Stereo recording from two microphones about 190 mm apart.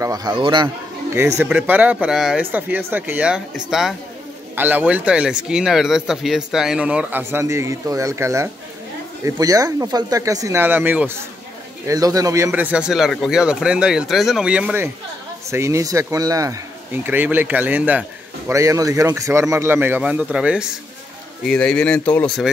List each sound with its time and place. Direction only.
0.0 s a man's voice: 20° right (ahead or behind)
1.4 s speech: 10° right (ahead or behind)
4.6 s speech: 10° right (ahead or behind)
12.4 s speech: 5° right (ahead or behind)